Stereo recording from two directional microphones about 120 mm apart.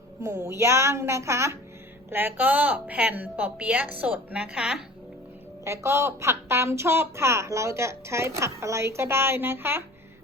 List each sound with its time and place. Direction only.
0.2 s a woman's voice: 25° right (ahead or behind); by 4.8 s 5° right (ahead or behind)
5.6 s a woman's voice: 25° right (ahead or behind)